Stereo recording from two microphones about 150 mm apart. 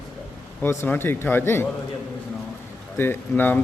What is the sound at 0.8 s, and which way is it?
Speech, 15° left (ahead or behind).